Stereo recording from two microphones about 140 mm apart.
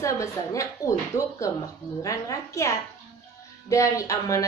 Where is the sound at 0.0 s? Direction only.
20° left (ahead or behind).